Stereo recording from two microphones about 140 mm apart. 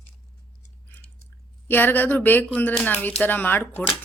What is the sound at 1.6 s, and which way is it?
A woman's voice, 15° left (ahead or behind).